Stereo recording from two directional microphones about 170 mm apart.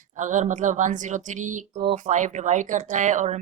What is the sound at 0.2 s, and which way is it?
A woman's voice, 45° right (ahead or behind).